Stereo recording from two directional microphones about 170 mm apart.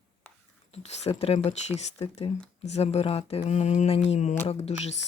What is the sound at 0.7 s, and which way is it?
Speech, 40° left (ahead or behind).